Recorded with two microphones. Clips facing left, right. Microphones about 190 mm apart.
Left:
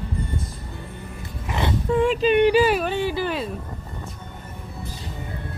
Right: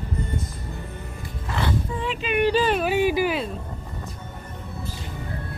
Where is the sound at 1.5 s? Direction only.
20° left (ahead or behind).